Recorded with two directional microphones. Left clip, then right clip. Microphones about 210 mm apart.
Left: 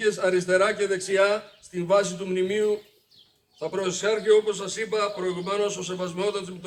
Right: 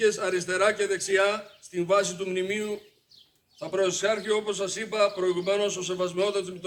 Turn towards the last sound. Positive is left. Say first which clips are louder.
# right 1 dB
turn(degrees=-35)  # may be behind; listen again after turning